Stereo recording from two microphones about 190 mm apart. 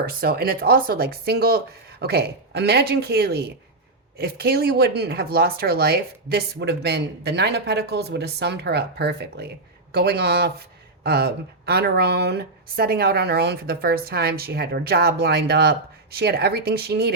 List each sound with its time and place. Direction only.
0.0 s speech: 50° right (ahead or behind)